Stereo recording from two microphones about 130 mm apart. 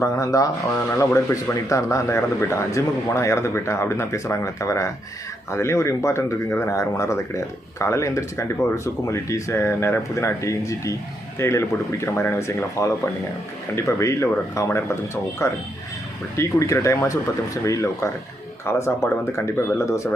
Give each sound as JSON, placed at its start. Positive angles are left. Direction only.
{"t": 0.0, "sound": "speech", "side_deg": 25}